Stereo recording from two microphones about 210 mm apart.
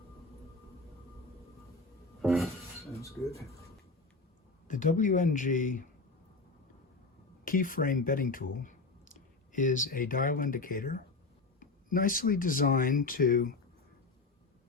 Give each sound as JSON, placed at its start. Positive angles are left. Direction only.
{"t": 2.2, "sound": "a sound", "side_deg": 0}
{"t": 4.7, "sound": "speech", "side_deg": 35}
{"t": 7.4, "sound": "speech", "side_deg": 40}